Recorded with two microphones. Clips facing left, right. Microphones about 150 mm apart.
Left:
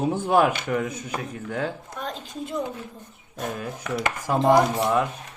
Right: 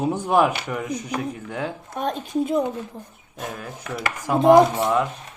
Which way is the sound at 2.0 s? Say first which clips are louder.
Right 9 dB; 60° right (ahead or behind).